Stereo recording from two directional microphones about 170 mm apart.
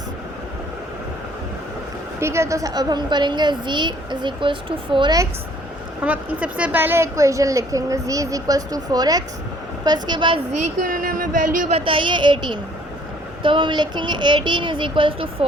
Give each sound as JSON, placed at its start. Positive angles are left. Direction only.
{"t": 2.2, "sound": "a woman's voice", "side_deg": -15}
{"t": 6.0, "sound": "a woman's voice", "side_deg": -10}
{"t": 10.8, "sound": "speech", "side_deg": -55}
{"t": 11.7, "sound": "a woman's voice", "side_deg": -30}